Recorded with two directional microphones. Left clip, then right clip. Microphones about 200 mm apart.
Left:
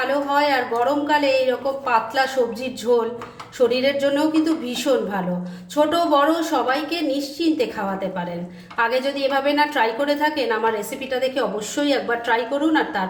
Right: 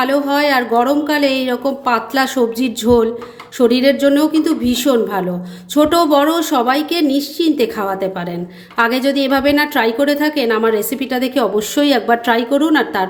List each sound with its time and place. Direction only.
0.0 s a woman's voice: 60° right (ahead or behind)
3.7 s a woman's voice: 60° right (ahead or behind)